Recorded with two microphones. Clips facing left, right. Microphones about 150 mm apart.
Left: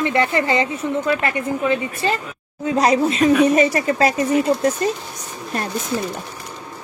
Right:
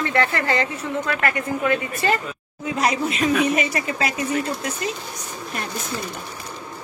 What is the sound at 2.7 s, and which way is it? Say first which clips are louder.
Speech: left 6 dB; 35° left (ahead or behind).